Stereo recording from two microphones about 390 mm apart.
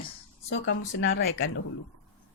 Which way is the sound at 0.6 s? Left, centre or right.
Left.